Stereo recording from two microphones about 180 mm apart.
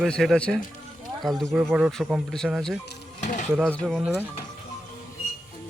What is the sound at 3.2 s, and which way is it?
Speech, 45° left (ahead or behind).